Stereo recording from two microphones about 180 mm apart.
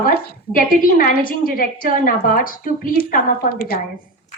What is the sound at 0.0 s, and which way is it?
A woman's voice, 55° left (ahead or behind).